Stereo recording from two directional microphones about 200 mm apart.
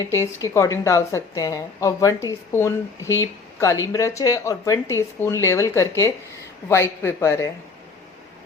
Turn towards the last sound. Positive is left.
turn(degrees=15)  # may be behind; listen again after turning